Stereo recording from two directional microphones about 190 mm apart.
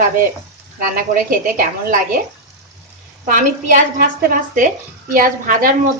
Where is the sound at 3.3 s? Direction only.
45° right (ahead or behind).